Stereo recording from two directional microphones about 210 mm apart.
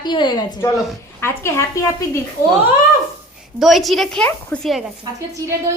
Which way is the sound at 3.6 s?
Centre (ahead or behind).